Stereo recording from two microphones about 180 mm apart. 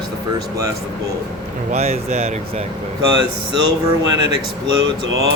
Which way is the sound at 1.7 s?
35° right (ahead or behind).